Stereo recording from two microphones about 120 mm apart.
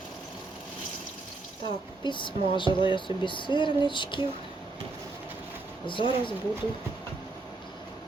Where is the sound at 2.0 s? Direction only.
40° left (ahead or behind).